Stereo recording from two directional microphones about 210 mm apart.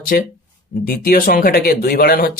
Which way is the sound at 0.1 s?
45° left (ahead or behind).